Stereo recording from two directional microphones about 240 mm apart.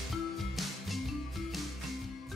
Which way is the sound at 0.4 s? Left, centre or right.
Centre.